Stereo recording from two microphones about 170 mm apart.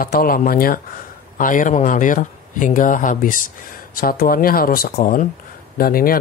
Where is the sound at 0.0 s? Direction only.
60° left (ahead or behind).